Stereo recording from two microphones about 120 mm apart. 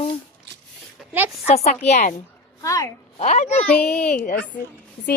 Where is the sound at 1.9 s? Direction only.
80° left.